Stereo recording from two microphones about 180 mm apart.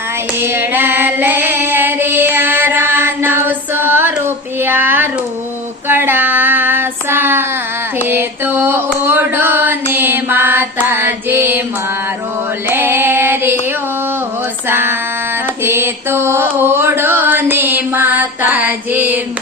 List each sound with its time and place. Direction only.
0.4 s female singing: 10° right (ahead or behind)
4.6 s a sound: 10° right (ahead or behind)
5.9 s child singing: 10° right (ahead or behind)
8.1 s mantra: 10° right (ahead or behind)
12.6 s female singing: 10° right (ahead or behind)
14.7 s a sound: 15° right (ahead or behind)
15.6 s mantra: 15° right (ahead or behind)